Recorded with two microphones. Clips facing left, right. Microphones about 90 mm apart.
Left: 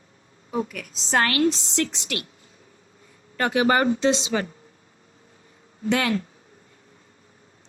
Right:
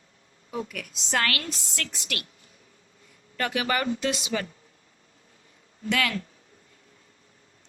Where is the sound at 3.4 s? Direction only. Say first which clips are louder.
Left 7 dB; 30° left (ahead or behind).